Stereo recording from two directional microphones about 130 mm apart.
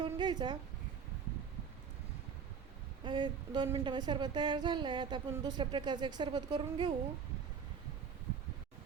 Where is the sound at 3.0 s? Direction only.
35° right (ahead or behind).